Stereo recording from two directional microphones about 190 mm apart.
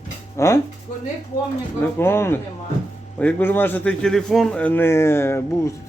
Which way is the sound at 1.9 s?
10° left (ahead or behind).